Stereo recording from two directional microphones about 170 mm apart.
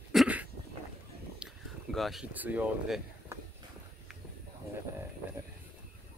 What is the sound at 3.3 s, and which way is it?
Walk, 15° right (ahead or behind).